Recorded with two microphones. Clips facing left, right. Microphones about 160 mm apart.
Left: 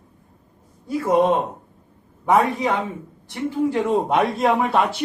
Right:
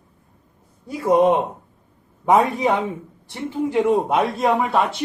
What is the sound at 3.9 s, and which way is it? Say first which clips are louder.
A man's voice: even; centre (ahead or behind).